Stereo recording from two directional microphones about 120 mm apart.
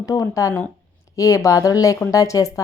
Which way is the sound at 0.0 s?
25° left (ahead or behind).